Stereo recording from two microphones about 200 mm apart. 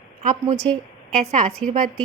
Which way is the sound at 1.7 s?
30° right (ahead or behind).